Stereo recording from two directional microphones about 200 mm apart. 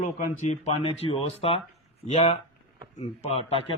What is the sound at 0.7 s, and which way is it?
A man's voice, 30° left (ahead or behind).